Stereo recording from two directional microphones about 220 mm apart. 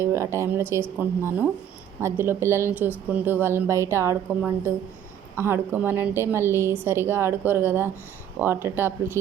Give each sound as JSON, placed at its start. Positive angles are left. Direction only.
{"t": 0.0, "sound": "a woman's voice", "side_deg": -10}